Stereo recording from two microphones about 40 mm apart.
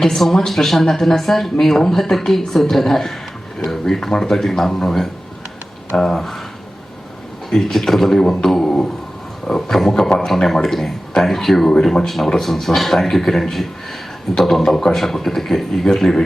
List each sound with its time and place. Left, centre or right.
0.0 s speech: centre
7.5 s speech: centre
8.2 s speech: centre